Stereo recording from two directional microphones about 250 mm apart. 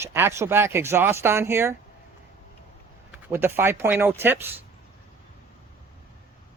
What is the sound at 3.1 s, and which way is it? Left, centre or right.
Speech, centre.